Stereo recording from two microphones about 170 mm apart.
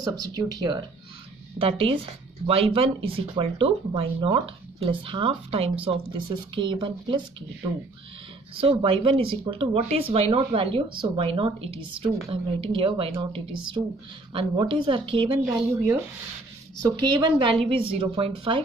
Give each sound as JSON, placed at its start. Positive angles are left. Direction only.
{"t": 0.0, "sound": "a woman's voice", "side_deg": -25}
{"t": 1.6, "sound": "speech", "side_deg": -35}
{"t": 8.5, "sound": "a woman's voice", "side_deg": -30}
{"t": 17.0, "sound": "a woman's voice", "side_deg": -25}